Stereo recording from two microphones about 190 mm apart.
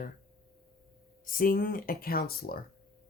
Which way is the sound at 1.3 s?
50° left (ahead or behind).